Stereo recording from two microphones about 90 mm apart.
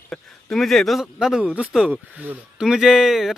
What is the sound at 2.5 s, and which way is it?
Speech, 5° right (ahead or behind).